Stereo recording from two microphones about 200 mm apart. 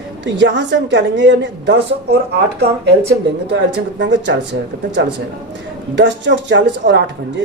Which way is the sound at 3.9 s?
65° right (ahead or behind).